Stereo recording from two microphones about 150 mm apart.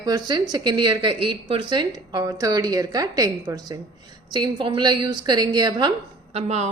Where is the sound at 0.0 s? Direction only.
25° right (ahead or behind).